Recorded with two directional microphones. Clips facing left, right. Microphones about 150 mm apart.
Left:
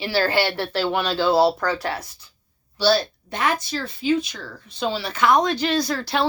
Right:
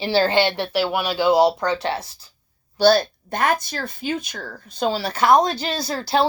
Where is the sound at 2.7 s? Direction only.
50° right (ahead or behind).